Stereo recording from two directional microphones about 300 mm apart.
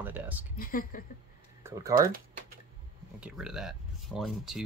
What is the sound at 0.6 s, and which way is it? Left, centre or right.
Speech, left.